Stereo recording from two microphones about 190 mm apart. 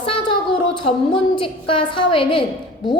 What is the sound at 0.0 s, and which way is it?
A woman's voice, 25° left (ahead or behind).